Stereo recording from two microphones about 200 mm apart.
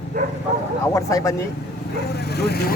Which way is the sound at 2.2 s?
55° left (ahead or behind).